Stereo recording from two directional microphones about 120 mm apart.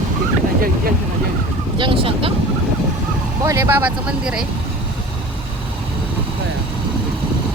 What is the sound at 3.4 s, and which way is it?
Speech, 25° right (ahead or behind).